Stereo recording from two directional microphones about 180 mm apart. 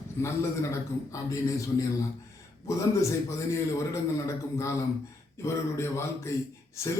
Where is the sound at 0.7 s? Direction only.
15° left (ahead or behind).